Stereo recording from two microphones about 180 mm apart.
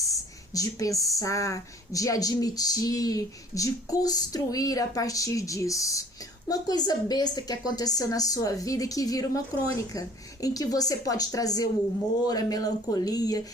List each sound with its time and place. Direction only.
0.1 s speech: 20° left (ahead or behind)